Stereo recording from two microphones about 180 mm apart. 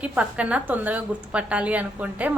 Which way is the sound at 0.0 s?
5° right (ahead or behind).